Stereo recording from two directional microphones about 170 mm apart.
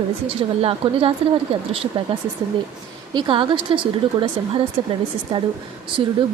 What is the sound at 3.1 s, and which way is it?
A woman's voice, 30° right (ahead or behind).